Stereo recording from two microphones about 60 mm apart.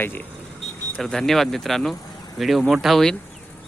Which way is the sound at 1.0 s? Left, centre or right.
Centre.